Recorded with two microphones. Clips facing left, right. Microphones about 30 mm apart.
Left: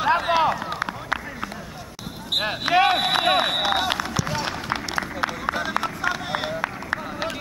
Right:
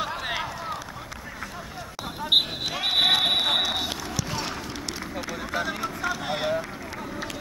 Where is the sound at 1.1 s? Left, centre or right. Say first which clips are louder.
Left 13 dB; left.